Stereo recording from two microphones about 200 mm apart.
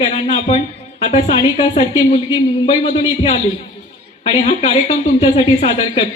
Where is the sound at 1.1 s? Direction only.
25° left (ahead or behind).